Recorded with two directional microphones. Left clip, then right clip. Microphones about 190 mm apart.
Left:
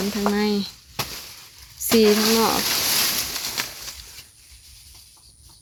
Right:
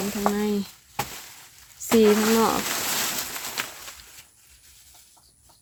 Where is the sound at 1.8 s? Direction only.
Centre (ahead or behind).